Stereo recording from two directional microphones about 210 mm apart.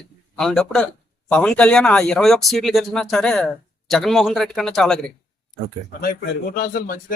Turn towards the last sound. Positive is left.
turn(degrees=45)  # may be behind; listen again after turning